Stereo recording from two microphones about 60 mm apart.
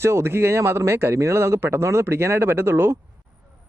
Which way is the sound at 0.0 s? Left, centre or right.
Right.